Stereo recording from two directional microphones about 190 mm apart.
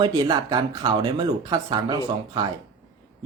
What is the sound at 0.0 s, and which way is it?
Speech, 20° right (ahead or behind).